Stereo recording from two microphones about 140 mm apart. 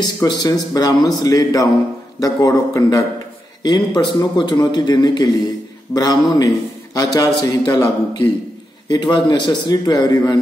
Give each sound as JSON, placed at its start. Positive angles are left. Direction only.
{"t": 0.0, "sound": "a man's voice", "side_deg": 25}